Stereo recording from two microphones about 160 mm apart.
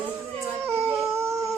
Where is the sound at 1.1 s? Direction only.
15° right (ahead or behind).